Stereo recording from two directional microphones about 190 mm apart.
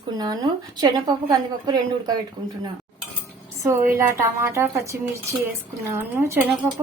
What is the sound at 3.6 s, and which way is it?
Speech, 15° right (ahead or behind).